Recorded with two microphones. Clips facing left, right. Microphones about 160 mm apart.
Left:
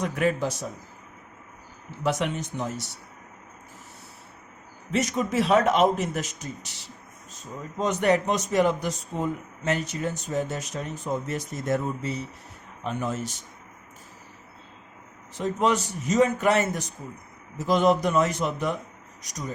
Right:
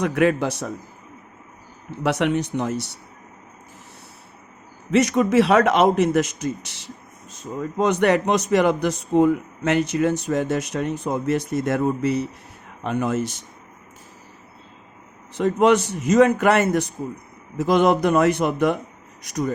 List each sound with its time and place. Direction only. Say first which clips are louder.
0.0 s a man's voice: right 6 dB; 75° right (ahead or behind)
2.0 s a man's voice: right 6 dB; 75° right (ahead or behind)
4.9 s a man's voice: right 8 dB; 80° right
15.4 s a man's voice: right 7 dB; 75° right (ahead or behind)